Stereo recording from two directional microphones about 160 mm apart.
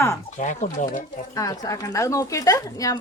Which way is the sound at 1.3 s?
20° left (ahead or behind).